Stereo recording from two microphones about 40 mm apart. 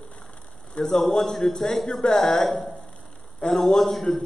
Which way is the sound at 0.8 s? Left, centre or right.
Left.